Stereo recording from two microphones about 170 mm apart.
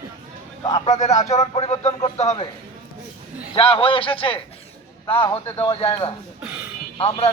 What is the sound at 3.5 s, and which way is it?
A man's voice, 35° left (ahead or behind).